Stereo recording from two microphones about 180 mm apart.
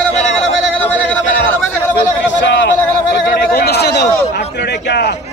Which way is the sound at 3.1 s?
60° left (ahead or behind).